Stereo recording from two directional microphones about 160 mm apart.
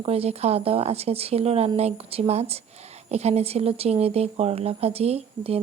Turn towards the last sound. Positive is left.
turn(degrees=-40)  # may be behind; listen again after turning